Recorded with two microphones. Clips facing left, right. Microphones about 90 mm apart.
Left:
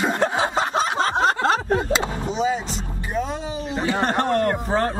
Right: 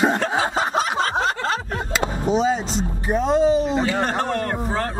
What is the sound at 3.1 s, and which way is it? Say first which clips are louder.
Speech: right 10 dB; 25° right (ahead or behind).